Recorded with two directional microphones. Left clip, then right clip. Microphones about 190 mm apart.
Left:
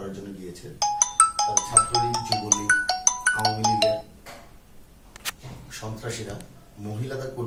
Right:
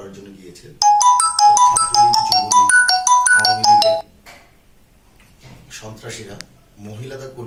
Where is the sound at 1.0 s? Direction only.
50° right (ahead or behind).